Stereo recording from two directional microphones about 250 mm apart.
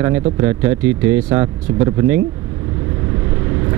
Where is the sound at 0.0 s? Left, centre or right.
Centre.